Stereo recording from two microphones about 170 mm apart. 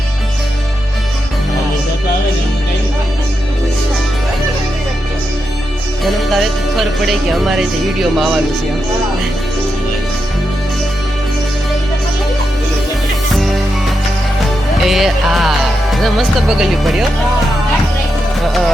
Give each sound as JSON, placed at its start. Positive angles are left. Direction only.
{"t": 6.3, "sound": "speech", "side_deg": 0}
{"t": 14.8, "sound": "speech", "side_deg": 0}